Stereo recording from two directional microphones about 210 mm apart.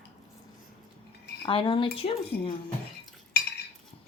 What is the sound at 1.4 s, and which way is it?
Speech, 25° left (ahead or behind).